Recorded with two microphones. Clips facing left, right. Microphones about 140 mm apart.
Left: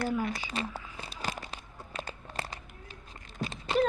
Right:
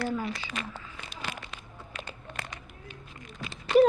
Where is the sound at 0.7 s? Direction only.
10° left (ahead or behind).